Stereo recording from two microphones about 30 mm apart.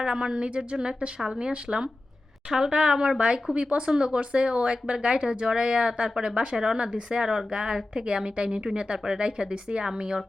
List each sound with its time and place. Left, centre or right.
0.0 s speech: right
2.5 s a woman's voice: right
3.2 s speech: right